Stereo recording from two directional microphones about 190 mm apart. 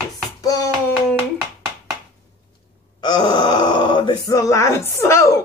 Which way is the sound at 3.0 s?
25° left (ahead or behind).